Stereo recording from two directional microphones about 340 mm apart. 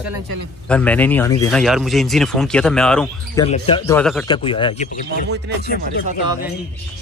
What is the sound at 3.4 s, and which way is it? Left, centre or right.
Speech, centre.